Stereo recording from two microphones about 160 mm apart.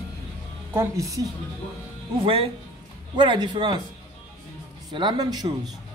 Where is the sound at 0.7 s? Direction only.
20° right (ahead or behind).